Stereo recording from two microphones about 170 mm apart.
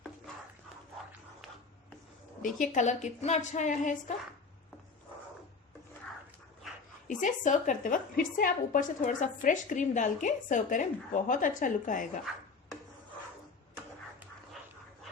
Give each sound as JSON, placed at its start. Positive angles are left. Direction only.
{"t": 2.4, "sound": "a woman's voice", "side_deg": 45}
{"t": 7.1, "sound": "a woman's voice", "side_deg": 50}